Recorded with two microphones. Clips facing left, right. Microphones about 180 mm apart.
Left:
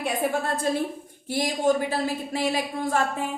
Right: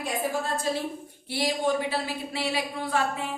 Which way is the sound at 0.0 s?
55° left (ahead or behind).